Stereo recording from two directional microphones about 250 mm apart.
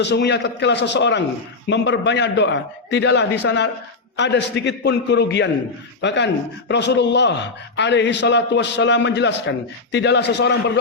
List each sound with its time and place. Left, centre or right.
0.0 s a man's voice: left